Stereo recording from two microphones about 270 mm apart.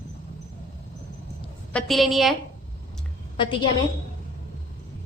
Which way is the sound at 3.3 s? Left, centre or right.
Centre.